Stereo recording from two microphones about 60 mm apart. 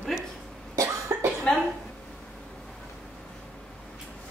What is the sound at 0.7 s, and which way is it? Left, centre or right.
Cough, right.